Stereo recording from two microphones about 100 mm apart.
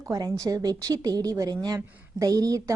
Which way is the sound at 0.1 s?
35° right (ahead or behind).